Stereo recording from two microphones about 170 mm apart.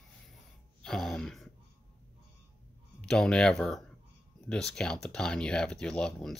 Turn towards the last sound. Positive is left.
turn(degrees=5)  # may be behind; listen again after turning